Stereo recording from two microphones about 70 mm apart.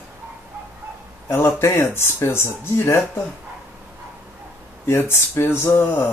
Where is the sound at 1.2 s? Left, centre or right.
Left.